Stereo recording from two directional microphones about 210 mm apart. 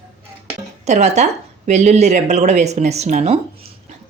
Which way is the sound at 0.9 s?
35° right (ahead or behind).